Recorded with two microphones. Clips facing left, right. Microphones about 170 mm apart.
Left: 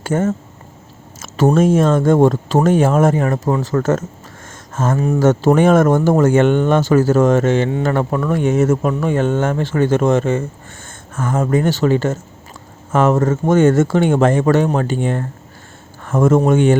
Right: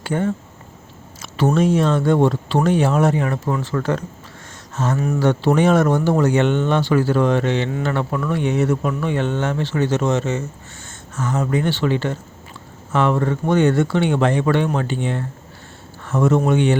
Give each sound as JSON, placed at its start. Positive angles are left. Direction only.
{"t": 0.0, "sound": "speech", "side_deg": 45}
{"t": 4.9, "sound": "speech", "side_deg": 35}